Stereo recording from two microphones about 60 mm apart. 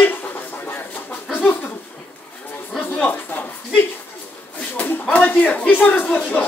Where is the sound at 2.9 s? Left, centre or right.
Left.